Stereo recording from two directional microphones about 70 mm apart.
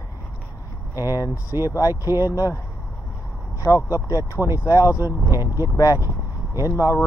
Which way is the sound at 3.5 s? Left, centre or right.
Left.